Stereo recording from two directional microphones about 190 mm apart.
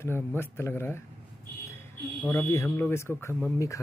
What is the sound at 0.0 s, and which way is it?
A man's voice, 10° left (ahead or behind).